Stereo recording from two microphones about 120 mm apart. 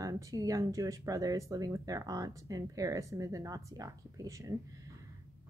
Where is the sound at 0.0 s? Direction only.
30° right (ahead or behind).